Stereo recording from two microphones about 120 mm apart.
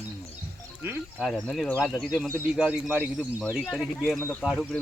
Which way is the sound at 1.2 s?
Centre (ahead or behind).